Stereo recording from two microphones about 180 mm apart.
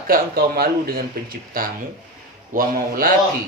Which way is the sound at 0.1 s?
55° right (ahead or behind).